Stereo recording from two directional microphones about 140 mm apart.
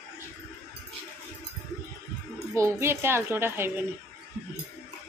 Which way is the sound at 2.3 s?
20° right (ahead or behind).